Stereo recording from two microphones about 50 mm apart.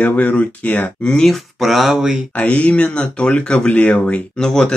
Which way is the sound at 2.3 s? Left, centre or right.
Left.